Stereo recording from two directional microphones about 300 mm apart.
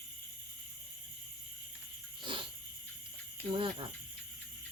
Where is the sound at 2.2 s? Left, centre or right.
Centre.